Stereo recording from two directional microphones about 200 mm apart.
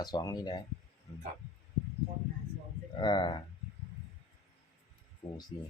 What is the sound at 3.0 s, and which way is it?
Speech, 25° left (ahead or behind).